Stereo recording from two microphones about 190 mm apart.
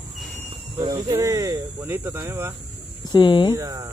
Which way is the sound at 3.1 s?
25° left (ahead or behind).